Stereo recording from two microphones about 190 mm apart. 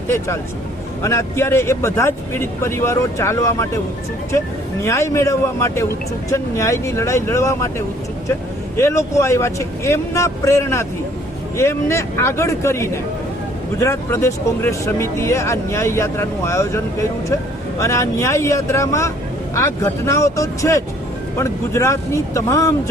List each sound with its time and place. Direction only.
1.0 s speech: 15° left (ahead or behind)
4.8 s speech: 15° left (ahead or behind)
8.7 s speech: 15° left (ahead or behind)